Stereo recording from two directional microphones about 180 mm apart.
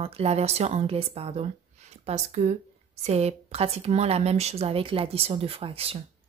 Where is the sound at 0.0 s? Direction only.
35° right (ahead or behind).